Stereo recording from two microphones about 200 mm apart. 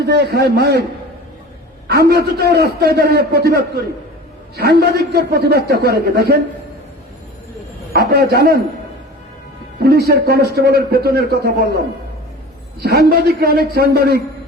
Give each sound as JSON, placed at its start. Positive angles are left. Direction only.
{"t": 0.0, "sound": "a man's voice", "side_deg": -55}
{"t": 1.9, "sound": "a man's voice", "side_deg": -50}
{"t": 7.9, "sound": "a man's voice", "side_deg": -50}
{"t": 10.1, "sound": "a man's voice", "side_deg": -50}
{"t": 12.8, "sound": "a man's voice", "side_deg": -50}